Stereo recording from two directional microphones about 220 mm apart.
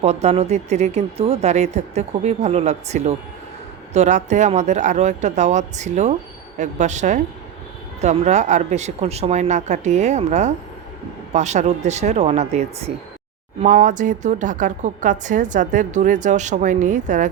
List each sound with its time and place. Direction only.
0.0 s speech: 30° right (ahead or behind)